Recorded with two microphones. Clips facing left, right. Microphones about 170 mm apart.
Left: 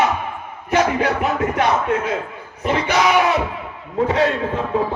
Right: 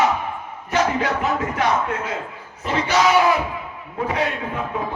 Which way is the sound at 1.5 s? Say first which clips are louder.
Left 3 dB; 20° left (ahead or behind).